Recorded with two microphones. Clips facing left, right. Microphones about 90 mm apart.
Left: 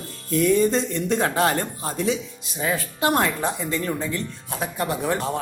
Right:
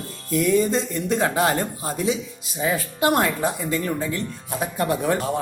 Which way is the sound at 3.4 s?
10° right (ahead or behind).